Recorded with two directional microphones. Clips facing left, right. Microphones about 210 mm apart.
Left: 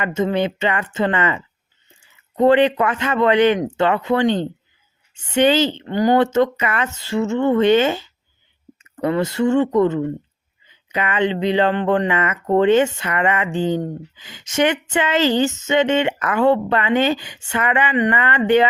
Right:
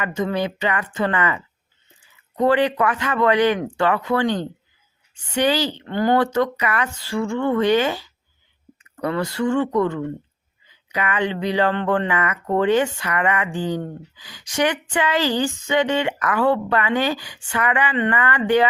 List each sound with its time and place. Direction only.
0.0 s speech: 25° left (ahead or behind)